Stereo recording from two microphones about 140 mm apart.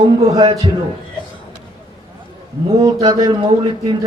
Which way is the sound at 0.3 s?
35° right (ahead or behind).